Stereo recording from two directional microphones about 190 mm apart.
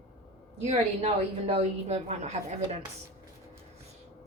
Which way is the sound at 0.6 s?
35° right (ahead or behind).